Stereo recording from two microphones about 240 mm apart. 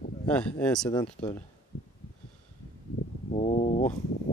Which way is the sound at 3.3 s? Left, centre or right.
Left.